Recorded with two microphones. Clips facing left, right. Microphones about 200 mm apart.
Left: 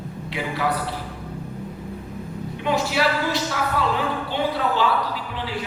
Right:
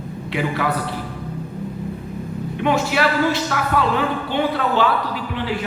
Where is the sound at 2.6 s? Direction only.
60° right (ahead or behind).